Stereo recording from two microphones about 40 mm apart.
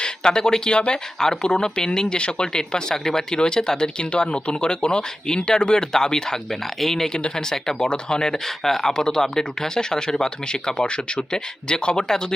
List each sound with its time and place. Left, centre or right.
0.0 s speech: centre